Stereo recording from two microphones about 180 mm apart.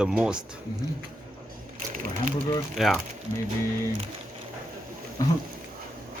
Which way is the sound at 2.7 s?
Centre (ahead or behind).